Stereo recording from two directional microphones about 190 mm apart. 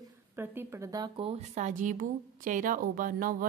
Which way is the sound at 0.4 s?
15° right (ahead or behind).